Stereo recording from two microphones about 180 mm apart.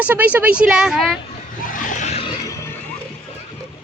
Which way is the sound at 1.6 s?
50° left (ahead or behind).